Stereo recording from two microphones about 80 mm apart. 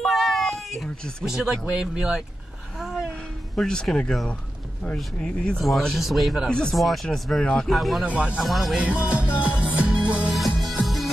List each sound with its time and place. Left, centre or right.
0.0 s a sound: centre
1.2 s speech: centre
2.8 s a sound: centre
3.5 s speech: centre
8.0 s speech: centre
8.5 s speech: centre
8.8 s speech: centre
9.3 s music: centre
10.3 s music: centre